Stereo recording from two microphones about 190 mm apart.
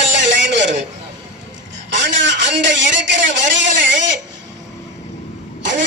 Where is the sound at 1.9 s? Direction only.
70° right (ahead or behind).